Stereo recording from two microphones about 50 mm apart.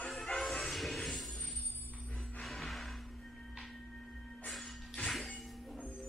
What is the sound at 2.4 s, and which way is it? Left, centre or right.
Music, centre.